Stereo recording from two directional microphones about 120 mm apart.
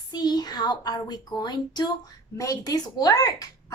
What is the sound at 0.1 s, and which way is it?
A child's voice, 35° left (ahead or behind).